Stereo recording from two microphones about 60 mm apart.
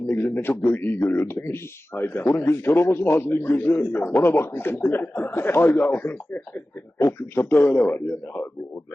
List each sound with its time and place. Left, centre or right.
0.1 s a man's voice: left
7.0 s speech: left
7.5 s speech: left